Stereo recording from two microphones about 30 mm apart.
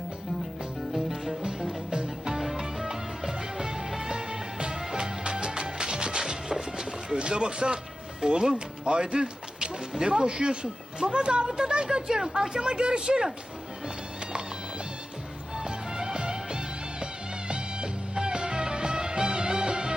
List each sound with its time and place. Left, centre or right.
0.9 s music: centre
1.4 s music: right
2.3 s music: centre
3.2 s music: right
8.4 s speech: right
15.5 s music: right